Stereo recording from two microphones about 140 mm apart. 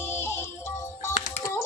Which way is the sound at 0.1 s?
15° left (ahead or behind).